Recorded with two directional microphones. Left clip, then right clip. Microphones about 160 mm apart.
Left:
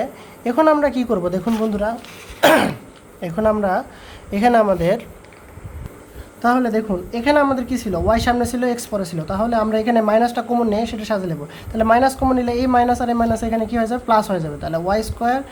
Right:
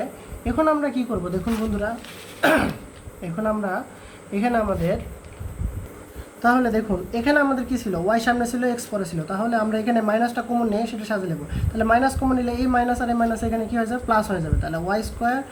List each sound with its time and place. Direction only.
0.4 s a woman's voice: 55° left (ahead or behind)
2.4 s throat clearing: 55° left (ahead or behind)
3.2 s a woman's voice: 60° left (ahead or behind)
6.4 s speech: 40° left (ahead or behind)